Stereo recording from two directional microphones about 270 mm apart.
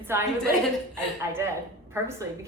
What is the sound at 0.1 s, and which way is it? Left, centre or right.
A woman's voice, centre.